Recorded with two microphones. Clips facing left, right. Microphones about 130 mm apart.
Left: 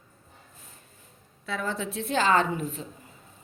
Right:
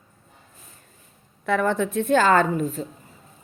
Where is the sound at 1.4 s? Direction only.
60° right (ahead or behind); by 2.9 s 40° right (ahead or behind).